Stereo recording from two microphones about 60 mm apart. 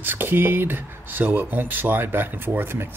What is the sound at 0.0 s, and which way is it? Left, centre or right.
Speech, right.